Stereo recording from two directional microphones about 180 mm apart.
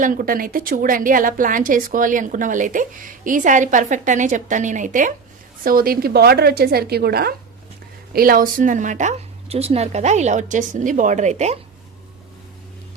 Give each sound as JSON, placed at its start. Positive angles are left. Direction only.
{"t": 0.0, "sound": "a woman's voice", "side_deg": -50}